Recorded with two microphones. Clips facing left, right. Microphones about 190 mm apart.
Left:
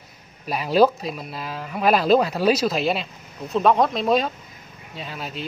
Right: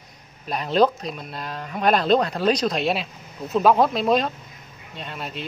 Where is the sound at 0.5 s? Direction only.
5° left (ahead or behind).